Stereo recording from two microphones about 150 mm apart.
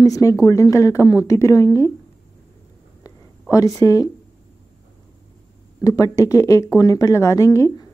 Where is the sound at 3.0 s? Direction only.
25° left (ahead or behind).